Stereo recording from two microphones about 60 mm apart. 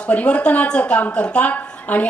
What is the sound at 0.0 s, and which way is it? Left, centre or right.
A woman's voice, left.